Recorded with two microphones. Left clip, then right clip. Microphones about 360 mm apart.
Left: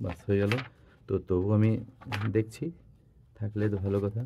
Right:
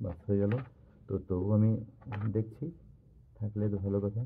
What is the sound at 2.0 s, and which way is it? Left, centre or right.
Speech, left.